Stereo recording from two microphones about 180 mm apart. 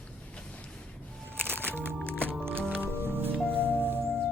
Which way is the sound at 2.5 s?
10° right (ahead or behind).